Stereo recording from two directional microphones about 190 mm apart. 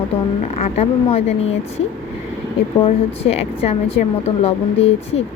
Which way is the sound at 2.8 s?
30° left (ahead or behind).